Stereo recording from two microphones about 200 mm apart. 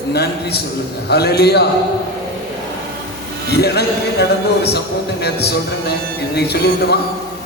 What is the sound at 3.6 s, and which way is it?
Music, 55° left (ahead or behind).